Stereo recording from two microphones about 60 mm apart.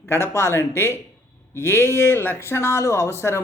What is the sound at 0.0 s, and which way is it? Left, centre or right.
Speech, left.